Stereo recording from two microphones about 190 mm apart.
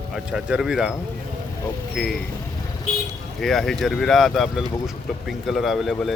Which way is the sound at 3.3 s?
Centre (ahead or behind).